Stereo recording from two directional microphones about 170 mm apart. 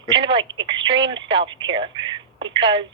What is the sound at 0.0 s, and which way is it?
Telephone, 30° right (ahead or behind).